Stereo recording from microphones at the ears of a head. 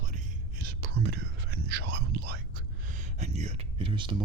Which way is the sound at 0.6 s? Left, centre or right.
Right.